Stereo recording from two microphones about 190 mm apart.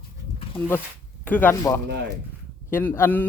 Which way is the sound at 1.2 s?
10° left (ahead or behind).